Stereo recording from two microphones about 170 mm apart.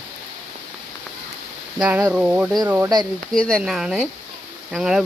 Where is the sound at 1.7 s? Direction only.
5° right (ahead or behind).